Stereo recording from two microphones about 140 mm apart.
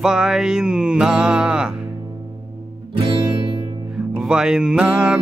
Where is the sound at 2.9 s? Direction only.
40° right (ahead or behind).